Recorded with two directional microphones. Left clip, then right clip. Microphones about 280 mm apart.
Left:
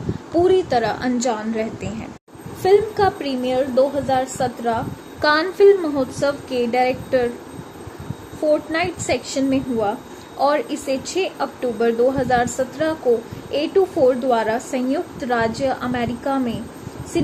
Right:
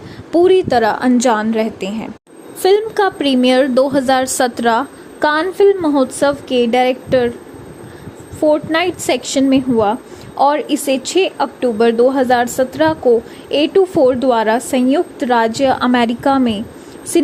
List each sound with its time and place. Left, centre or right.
0.3 s a woman's voice: right
8.4 s a woman's voice: right